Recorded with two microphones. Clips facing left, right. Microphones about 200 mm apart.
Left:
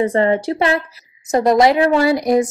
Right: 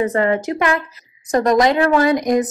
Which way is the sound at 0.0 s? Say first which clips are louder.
Left 2 dB; 30° left (ahead or behind).